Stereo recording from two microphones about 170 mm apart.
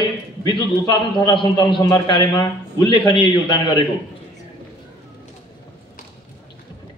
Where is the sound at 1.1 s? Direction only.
25° left (ahead or behind).